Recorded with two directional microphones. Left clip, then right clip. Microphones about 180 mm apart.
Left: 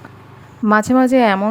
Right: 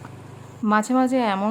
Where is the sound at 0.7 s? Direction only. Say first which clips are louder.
Left 7 dB; 30° left (ahead or behind).